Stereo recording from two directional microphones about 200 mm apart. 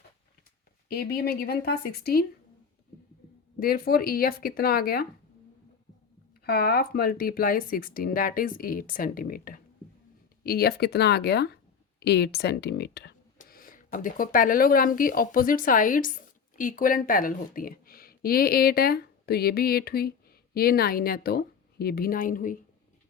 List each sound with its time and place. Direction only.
0.9 s speech: 50° left (ahead or behind)
3.6 s speech: 50° left (ahead or behind)
6.4 s speech: 50° left (ahead or behind)
13.4 s speech: 45° left (ahead or behind)